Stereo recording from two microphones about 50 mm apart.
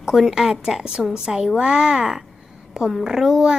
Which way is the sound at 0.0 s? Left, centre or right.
Centre.